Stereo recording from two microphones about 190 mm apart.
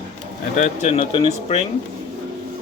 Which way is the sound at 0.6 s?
40° left (ahead or behind).